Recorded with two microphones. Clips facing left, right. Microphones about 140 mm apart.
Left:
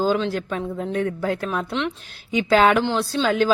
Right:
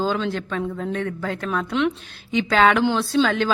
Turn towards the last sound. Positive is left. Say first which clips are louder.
# even
turn(degrees=5)  # may be behind; listen again after turning